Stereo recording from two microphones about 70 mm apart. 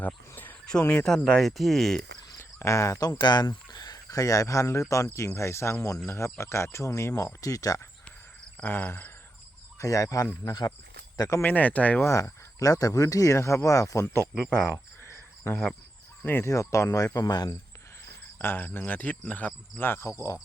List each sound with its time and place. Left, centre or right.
0.0 s a sound: left
0.6 s speech: centre
2.4 s speech: left
8.6 s speech: left
9.7 s speech: left
10.4 s speech: left
11.2 s speech: left
11.4 s cricket: left
12.0 s speech: left
16.2 s speech: left
16.5 s speech: left
17.2 s speech: left
18.3 s cricket: left